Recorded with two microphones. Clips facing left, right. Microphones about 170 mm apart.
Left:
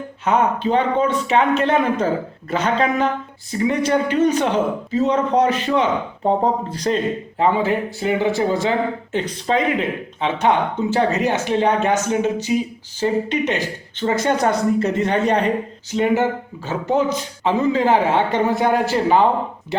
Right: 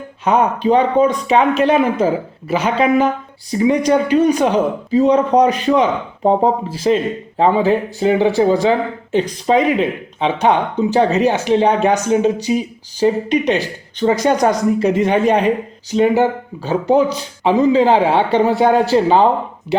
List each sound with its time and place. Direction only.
0.3 s a man's voice: 15° right (ahead or behind)
7.3 s a man's voice: 20° right (ahead or behind)